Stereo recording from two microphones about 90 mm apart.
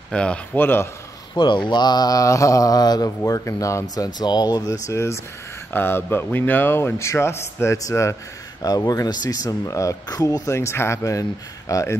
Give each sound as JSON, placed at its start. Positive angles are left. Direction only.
{"t": 0.1, "sound": "speech", "side_deg": 10}
{"t": 0.6, "sound": "speech", "side_deg": 25}
{"t": 1.3, "sound": "speech", "side_deg": 60}
{"t": 1.7, "sound": "mantra", "side_deg": 50}
{"t": 3.3, "sound": "speech", "side_deg": 40}
{"t": 8.6, "sound": "speech", "side_deg": 45}